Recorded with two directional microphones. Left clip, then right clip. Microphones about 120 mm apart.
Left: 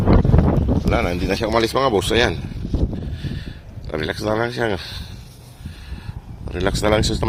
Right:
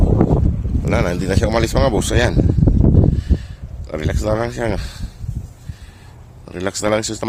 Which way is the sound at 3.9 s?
35° right (ahead or behind).